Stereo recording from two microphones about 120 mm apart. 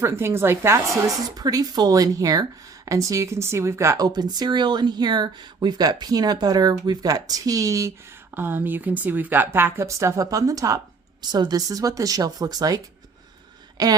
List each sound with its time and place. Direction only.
0.0 s a woman's voice: 20° right (ahead or behind)